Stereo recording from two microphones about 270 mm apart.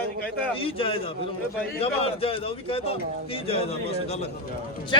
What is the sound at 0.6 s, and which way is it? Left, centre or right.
Speech, centre.